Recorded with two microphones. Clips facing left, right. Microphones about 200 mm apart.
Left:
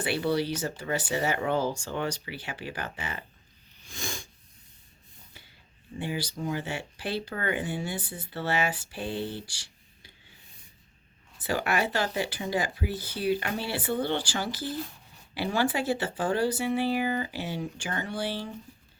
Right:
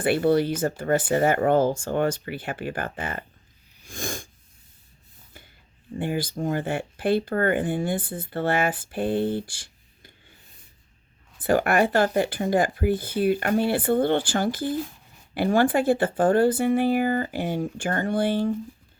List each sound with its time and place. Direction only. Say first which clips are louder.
0.0 s speech: right 7 dB; 50° right (ahead or behind)
3.8 s wheeze: right 6 dB; 50° right (ahead or behind)
6.0 s speech: right 6 dB; 50° right (ahead or behind)
11.3 s speech: right 8 dB; 55° right (ahead or behind)